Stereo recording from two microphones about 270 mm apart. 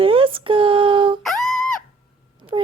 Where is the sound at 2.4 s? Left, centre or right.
Centre.